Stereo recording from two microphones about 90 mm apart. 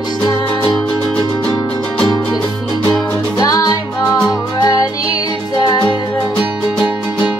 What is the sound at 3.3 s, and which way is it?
Music, 40° left (ahead or behind).